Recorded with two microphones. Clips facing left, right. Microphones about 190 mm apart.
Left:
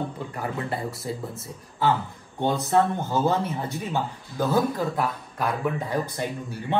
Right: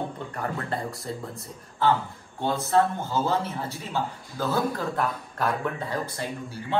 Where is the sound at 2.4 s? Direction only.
15° left (ahead or behind).